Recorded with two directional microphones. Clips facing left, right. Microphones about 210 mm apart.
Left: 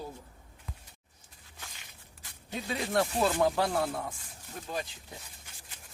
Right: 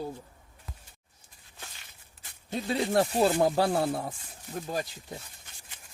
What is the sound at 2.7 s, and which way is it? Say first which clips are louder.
Speech: right 4 dB; 30° right (ahead or behind).